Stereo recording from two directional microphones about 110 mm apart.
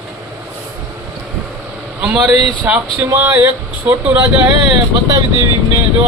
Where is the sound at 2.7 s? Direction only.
15° right (ahead or behind).